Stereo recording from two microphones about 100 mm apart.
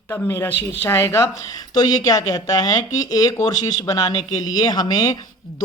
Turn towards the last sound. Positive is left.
turn(degrees=40)  # may be behind; listen again after turning